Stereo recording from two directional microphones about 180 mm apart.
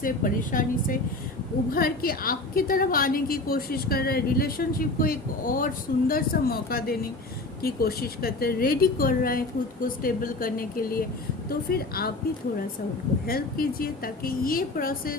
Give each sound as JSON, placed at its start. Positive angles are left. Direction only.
{"t": 0.0, "sound": "a woman's voice", "side_deg": 50}
{"t": 13.2, "sound": "a woman's voice", "side_deg": 55}